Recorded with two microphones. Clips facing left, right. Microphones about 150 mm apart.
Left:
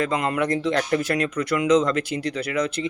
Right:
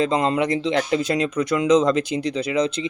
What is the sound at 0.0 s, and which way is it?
Speech, 20° right (ahead or behind).